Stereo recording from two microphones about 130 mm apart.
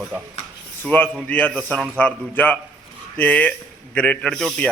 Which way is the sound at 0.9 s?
15° left (ahead or behind).